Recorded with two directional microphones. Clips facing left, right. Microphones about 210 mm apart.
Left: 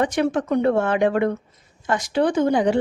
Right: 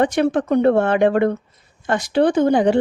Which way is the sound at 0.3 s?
35° right (ahead or behind).